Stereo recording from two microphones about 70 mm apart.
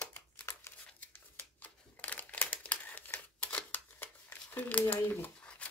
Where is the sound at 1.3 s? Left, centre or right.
Left.